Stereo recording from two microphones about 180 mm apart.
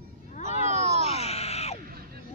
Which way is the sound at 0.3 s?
40° left (ahead or behind).